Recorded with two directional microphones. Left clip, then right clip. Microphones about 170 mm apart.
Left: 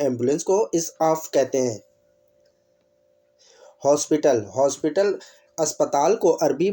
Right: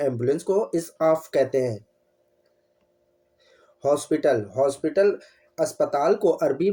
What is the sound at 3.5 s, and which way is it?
Speech, 30° left (ahead or behind).